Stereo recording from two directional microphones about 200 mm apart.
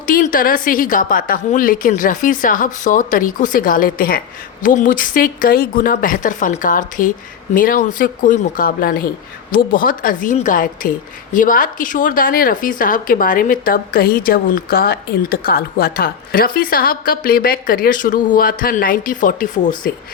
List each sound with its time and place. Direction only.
0.1 s a woman's voice: 45° left (ahead or behind)